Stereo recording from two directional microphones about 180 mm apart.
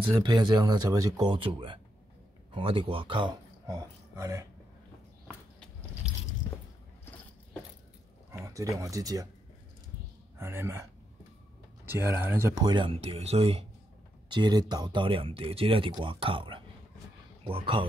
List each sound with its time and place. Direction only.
0.2 s speech: 25° right (ahead or behind)
6.5 s biting: 15° left (ahead or behind)
8.3 s speech: 15° right (ahead or behind)
10.3 s speech: 15° right (ahead or behind); by 13.7 s 35° right (ahead or behind)
14.3 s speech: 25° right (ahead or behind)